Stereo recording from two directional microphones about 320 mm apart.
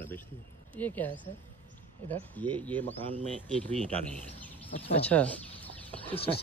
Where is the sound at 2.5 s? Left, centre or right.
Centre.